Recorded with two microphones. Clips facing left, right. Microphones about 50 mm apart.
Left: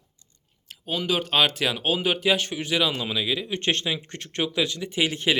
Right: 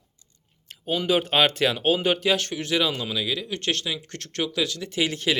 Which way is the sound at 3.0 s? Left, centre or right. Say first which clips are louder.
Left 1 dB; centre.